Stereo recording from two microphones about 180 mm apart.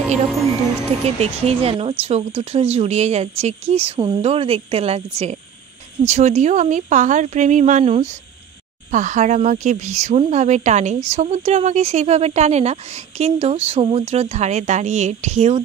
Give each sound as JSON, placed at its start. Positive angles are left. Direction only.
{"t": 1.0, "sound": "speech", "side_deg": -35}